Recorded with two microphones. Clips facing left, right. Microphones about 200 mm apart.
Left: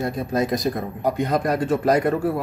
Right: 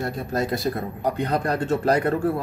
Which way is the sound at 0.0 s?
20° left (ahead or behind).